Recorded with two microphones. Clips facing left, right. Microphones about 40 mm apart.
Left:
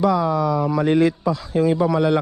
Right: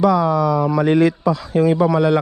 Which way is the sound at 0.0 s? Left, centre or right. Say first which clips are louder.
Right 3 dB; right.